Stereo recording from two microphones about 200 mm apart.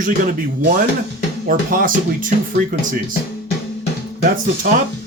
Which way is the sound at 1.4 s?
45° right (ahead or behind).